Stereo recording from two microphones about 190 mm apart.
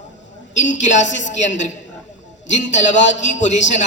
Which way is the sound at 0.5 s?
40° left (ahead or behind).